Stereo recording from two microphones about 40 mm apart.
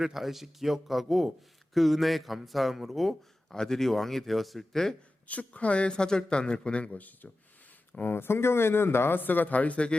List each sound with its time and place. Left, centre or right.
0.0 s a man's voice: centre
3.5 s speech: centre
5.3 s speech: left
8.1 s speech: left